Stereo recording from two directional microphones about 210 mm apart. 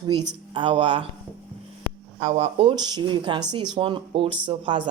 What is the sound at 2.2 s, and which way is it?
Speech, 30° right (ahead or behind).